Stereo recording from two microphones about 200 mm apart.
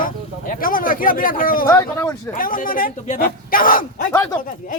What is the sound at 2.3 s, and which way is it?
Speech, 45° left (ahead or behind).